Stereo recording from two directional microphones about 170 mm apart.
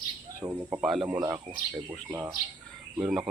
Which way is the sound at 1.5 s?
40° right (ahead or behind).